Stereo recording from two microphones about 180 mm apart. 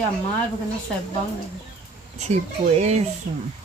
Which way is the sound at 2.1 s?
40° right (ahead or behind).